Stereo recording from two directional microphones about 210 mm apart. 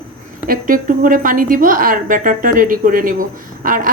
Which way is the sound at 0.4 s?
40° right (ahead or behind).